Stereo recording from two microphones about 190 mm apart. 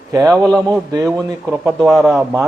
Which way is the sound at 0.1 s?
15° right (ahead or behind).